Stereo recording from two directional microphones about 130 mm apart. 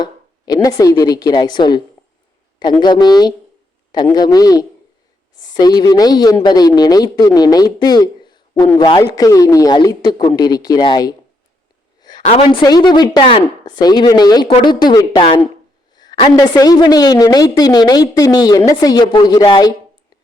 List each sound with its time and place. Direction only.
0.0 s speech: 30° left (ahead or behind)
2.8 s a woman's voice: 35° left (ahead or behind)
12.1 s a sound: 30° left (ahead or behind)
12.6 s a woman's voice: 35° left (ahead or behind)
16.3 s a woman's voice: 30° left (ahead or behind)